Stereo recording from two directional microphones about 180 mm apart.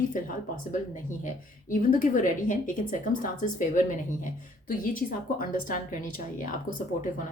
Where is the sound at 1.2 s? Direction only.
50° left (ahead or behind).